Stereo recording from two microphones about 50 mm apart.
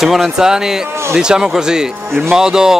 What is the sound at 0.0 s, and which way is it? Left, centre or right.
Speech, centre.